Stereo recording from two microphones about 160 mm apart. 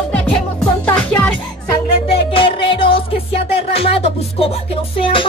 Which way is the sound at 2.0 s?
35° left (ahead or behind).